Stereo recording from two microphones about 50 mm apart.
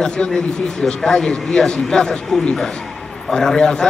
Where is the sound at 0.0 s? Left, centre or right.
Centre.